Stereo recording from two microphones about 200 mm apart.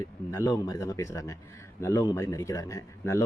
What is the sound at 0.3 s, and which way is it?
A man's voice, 15° left (ahead or behind).